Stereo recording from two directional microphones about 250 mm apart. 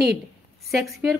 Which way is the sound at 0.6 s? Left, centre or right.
Centre.